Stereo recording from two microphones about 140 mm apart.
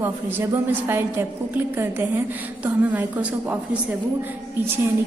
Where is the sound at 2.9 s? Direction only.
10° right (ahead or behind).